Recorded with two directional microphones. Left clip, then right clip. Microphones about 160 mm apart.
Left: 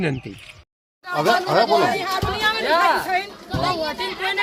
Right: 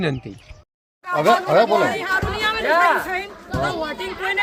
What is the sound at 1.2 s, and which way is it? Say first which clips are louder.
Speech: right 2 dB; 90° right.